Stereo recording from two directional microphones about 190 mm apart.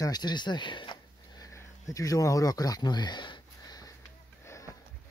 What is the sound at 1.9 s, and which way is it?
Speech, 20° left (ahead or behind).